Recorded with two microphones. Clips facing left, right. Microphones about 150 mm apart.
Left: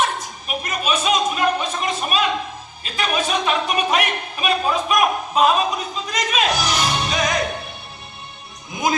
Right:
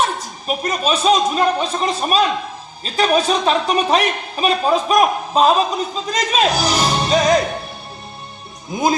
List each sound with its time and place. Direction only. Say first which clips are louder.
0.4 s a man's voice: right 5 dB; 35° right (ahead or behind)
8.7 s music: right 4 dB; 30° right (ahead or behind)